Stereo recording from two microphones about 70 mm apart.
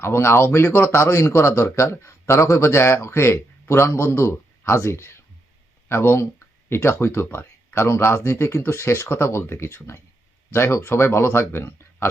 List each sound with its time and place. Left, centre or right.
0.0 s a man's voice: left
1.0 s a man's voice: left